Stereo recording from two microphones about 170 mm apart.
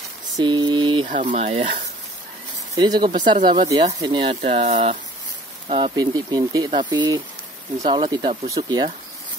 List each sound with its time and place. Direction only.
0.4 s a sound: 25° right (ahead or behind)
1.0 s speech: 50° right (ahead or behind)
2.7 s speech: 25° right (ahead or behind)
5.9 s speech: 20° right (ahead or behind)